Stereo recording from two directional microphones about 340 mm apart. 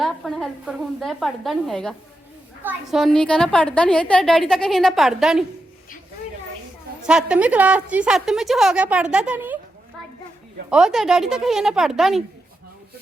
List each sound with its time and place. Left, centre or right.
0.0 s a woman's voice: centre
7.1 s a woman's voice: centre
10.7 s a woman's voice: centre